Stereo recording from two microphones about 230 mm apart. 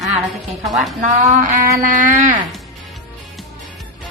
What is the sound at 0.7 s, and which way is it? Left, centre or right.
Speech, centre.